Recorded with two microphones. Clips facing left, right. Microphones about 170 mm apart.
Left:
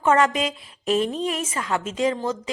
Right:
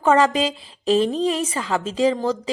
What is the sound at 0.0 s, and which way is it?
A woman's voice, 30° right (ahead or behind).